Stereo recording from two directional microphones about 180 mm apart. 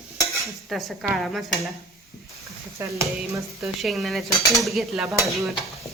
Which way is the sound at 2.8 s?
15° right (ahead or behind).